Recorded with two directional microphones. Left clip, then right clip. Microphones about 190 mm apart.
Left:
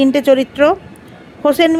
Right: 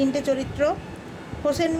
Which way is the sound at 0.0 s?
40° left (ahead or behind).